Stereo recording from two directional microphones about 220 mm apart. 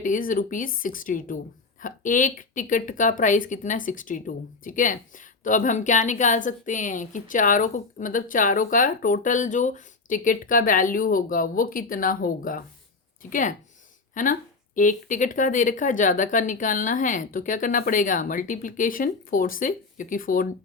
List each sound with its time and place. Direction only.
0.0 s a woman's voice: 35° left (ahead or behind)
14.1 s a woman's voice: 35° left (ahead or behind)